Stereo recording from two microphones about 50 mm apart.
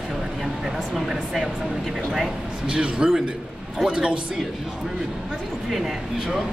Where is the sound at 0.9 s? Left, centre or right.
Centre.